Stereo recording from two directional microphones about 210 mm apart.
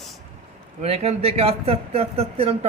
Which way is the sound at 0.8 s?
30° right (ahead or behind).